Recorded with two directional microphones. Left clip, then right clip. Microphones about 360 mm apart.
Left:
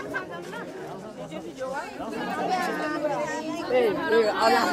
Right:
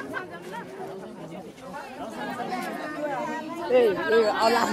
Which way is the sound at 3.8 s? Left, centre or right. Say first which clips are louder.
Right 1 dB; centre.